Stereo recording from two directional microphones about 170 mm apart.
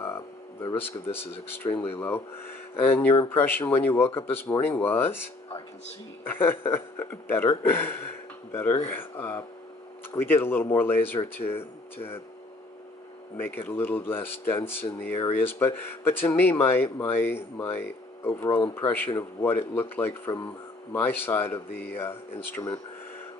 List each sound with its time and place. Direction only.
0.0 s speech: 15° left (ahead or behind)
11.4 s speech: 35° left (ahead or behind)
13.4 s speech: 10° left (ahead or behind)